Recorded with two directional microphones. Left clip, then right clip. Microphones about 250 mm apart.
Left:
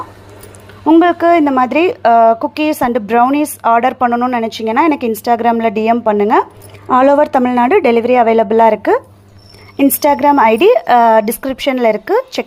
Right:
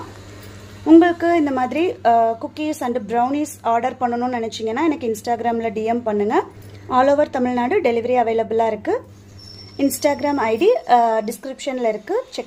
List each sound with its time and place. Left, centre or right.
0.9 s a woman's voice: centre